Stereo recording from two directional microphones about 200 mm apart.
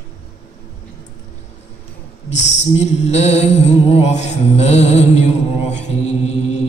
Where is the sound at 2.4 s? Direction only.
35° left (ahead or behind).